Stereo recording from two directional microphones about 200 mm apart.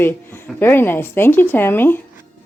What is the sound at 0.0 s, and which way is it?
Speech, 10° left (ahead or behind).